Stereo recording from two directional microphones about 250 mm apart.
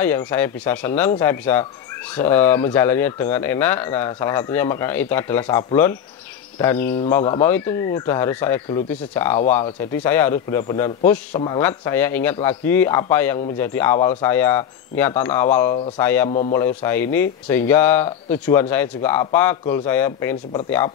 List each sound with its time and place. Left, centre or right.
0.0 s speech: centre
16.3 s a man's voice: left
16.5 s speech: centre